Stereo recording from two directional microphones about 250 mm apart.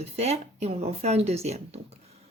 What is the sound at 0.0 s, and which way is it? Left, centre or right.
Speech, right.